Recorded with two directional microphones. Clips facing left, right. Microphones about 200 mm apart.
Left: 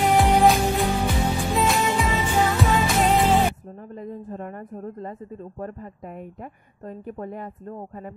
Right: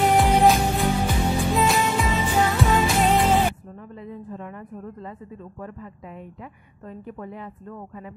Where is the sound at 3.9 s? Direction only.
45° left (ahead or behind).